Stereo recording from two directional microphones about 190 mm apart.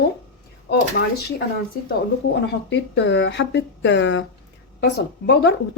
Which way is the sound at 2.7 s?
70° left (ahead or behind).